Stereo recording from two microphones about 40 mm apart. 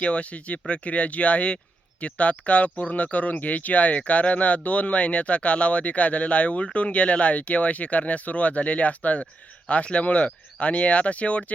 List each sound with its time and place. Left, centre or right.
0.0 s speech: left